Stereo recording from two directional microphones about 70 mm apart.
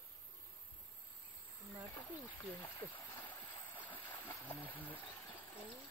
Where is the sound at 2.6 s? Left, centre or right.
Left.